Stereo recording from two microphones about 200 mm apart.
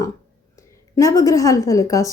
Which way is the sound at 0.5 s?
15° left (ahead or behind).